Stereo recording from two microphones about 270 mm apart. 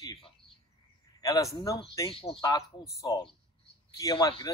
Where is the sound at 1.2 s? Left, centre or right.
Centre.